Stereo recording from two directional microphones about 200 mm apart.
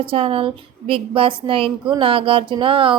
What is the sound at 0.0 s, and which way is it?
A woman's voice, 30° right (ahead or behind).